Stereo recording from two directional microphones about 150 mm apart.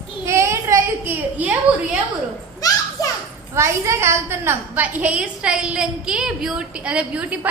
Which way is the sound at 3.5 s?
20° right (ahead or behind).